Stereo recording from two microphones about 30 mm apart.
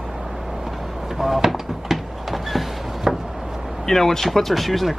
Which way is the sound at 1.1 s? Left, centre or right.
Centre.